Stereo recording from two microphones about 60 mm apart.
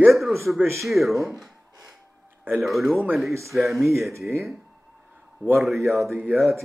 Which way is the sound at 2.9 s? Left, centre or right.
Right.